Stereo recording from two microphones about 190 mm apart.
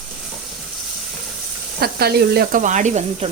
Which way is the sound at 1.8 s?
55° right (ahead or behind).